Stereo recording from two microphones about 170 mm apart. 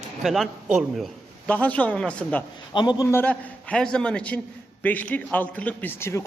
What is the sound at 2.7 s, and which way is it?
Speech, 25° left (ahead or behind).